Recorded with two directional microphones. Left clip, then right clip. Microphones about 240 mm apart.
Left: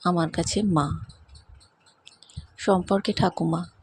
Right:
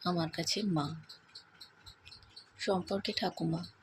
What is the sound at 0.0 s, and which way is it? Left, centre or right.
Speech, left.